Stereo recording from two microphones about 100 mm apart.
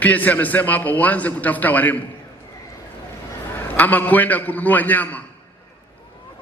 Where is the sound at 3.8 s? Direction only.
15° left (ahead or behind).